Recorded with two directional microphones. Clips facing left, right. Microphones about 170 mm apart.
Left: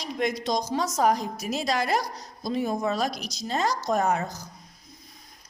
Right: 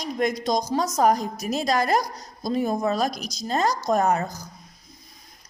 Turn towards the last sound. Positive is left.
turn(degrees=-40)  # may be behind; listen again after turning